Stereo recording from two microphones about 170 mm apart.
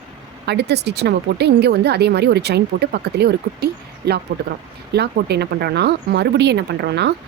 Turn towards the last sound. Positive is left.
turn(degrees=-80)